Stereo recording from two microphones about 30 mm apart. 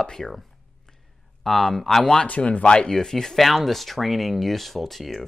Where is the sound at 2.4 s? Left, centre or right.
Left.